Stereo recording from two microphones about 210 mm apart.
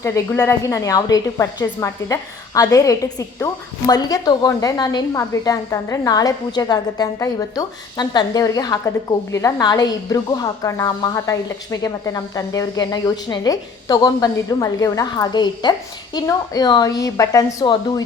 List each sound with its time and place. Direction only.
0.0 s a woman's voice: 15° left (ahead or behind)